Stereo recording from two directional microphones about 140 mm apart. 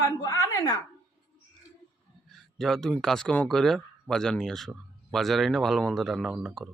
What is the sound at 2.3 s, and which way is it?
Speech, 5° left (ahead or behind).